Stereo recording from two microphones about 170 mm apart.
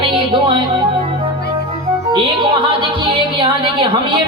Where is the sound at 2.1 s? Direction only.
30° right (ahead or behind).